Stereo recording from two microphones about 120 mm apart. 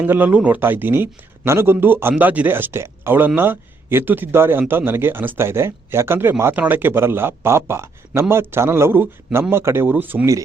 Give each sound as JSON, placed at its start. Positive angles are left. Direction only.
{"t": 0.0, "sound": "a man's voice", "side_deg": -15}